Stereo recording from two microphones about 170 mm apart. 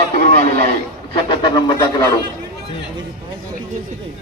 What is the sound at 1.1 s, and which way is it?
Speech, 30° left (ahead or behind).